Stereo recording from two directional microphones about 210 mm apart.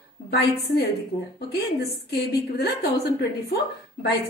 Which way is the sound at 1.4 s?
50° left (ahead or behind).